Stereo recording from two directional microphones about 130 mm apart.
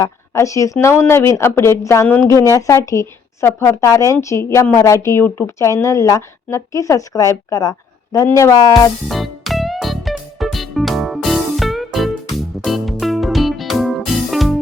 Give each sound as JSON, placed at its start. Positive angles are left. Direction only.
{"t": 0.0, "sound": "speech", "side_deg": 25}
{"t": 9.0, "sound": "music", "side_deg": 0}